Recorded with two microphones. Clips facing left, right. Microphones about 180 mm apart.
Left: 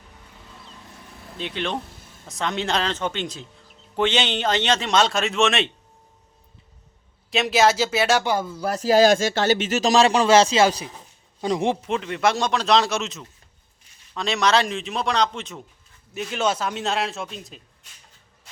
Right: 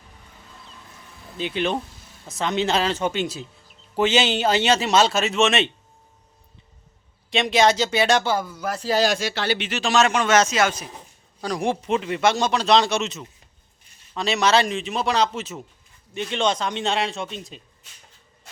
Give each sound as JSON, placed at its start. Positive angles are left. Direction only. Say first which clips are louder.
{"t": 1.4, "sound": "a man's voice", "louder": "right 4 dB", "side_deg": -5}
{"t": 7.3, "sound": "a man's voice", "louder": "even", "side_deg": 5}
{"t": 8.2, "sound": "a man's voice", "louder": "left 1 dB", "side_deg": 20}
{"t": 11.8, "sound": "a man's voice", "louder": "right 2 dB", "side_deg": 0}